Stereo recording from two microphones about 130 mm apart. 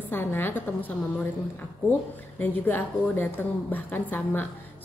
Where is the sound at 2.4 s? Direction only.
15° left (ahead or behind).